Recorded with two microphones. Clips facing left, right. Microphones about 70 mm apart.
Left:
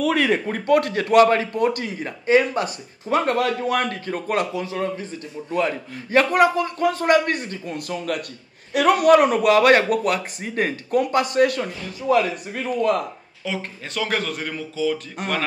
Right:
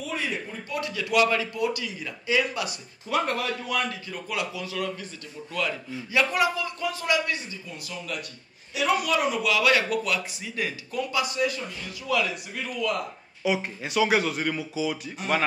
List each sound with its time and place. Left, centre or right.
0.0 s speech: left
3.3 s a man's voice: left
5.9 s speech: left
12.1 s a man's voice: left
13.4 s speech: centre
15.2 s speech: left